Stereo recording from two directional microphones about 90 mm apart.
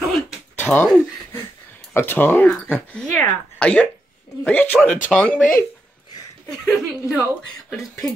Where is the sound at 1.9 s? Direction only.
25° left (ahead or behind).